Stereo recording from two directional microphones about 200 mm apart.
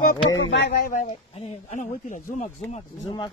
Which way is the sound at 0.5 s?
50° left (ahead or behind).